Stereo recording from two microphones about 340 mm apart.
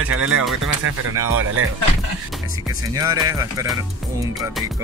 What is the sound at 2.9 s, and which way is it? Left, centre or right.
Speech, centre.